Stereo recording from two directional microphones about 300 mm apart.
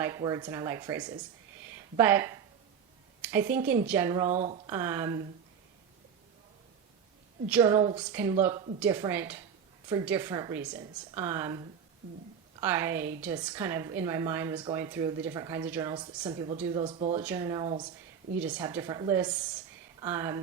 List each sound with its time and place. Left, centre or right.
0.0 s a woman's voice: centre
1.6 s a sound: centre
3.2 s a woman's voice: centre
4.3 s speech: right
4.6 s a woman's voice: centre
7.5 s a woman's voice: centre